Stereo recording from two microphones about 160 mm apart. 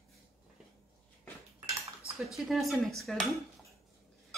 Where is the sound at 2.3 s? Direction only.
Centre (ahead or behind).